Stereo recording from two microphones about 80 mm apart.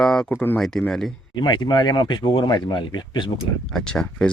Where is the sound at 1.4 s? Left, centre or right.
Left.